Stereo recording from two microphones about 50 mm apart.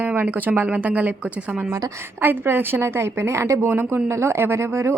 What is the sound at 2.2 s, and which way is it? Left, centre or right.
A woman's voice, right.